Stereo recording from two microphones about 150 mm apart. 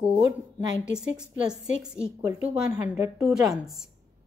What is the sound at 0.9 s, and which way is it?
A woman's voice, 5° right (ahead or behind).